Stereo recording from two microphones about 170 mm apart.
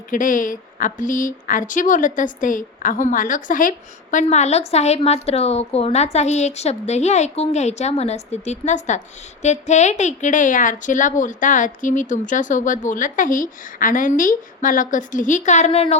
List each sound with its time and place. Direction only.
0.1 s a woman's voice: 50° left (ahead or behind)